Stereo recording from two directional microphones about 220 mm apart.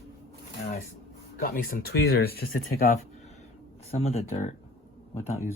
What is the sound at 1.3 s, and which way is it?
Speech, 40° left (ahead or behind).